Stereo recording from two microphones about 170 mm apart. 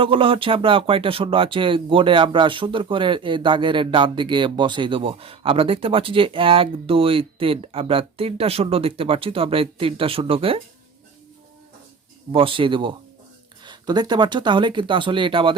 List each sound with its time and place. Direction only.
0.0 s speech: 30° right (ahead or behind)
12.3 s speech: 30° right (ahead or behind)